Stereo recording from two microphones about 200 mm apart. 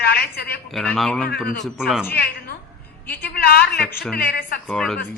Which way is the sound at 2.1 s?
50° left (ahead or behind).